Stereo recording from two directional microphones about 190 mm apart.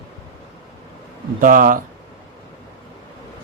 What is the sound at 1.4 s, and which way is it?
Speech, 45° right (ahead or behind).